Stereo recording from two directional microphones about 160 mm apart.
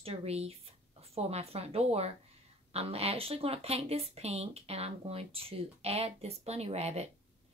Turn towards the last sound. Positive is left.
turn(degrees=-40)  # may be behind; listen again after turning